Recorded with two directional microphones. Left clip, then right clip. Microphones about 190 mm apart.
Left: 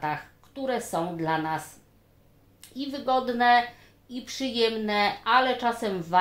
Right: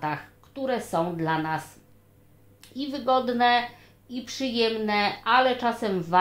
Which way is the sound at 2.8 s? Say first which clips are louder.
Right 2 dB; 20° right (ahead or behind).